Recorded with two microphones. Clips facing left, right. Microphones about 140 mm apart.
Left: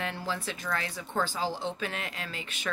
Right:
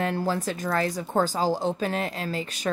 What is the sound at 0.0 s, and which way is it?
Speech, 45° right (ahead or behind).